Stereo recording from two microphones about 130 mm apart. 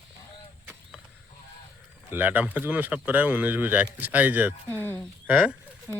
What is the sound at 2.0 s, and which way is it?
Speech, 15° right (ahead or behind).